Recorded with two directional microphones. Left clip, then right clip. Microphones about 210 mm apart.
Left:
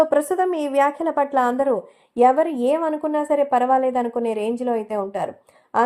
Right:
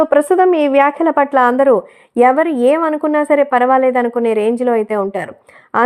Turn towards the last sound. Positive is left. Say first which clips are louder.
# right 5 dB
turn(degrees=-30)  # may be behind; listen again after turning